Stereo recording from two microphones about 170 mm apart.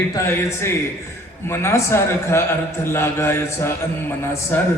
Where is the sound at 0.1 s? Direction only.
15° left (ahead or behind).